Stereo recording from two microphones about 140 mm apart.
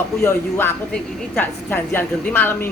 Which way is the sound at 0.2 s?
15° left (ahead or behind).